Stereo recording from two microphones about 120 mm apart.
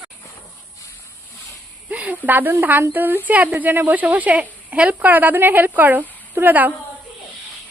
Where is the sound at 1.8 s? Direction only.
15° right (ahead or behind).